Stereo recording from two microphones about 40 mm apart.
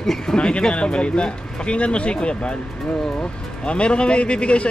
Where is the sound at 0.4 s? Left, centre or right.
Left.